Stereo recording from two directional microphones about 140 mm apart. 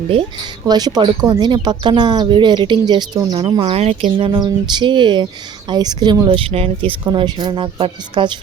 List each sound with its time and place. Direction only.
0.1 s speech: 40° right (ahead or behind)
4.3 s speech: 30° right (ahead or behind)
7.0 s speech: 30° right (ahead or behind)